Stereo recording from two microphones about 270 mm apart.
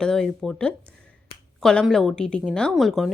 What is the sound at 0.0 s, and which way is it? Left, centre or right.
A woman's voice, centre.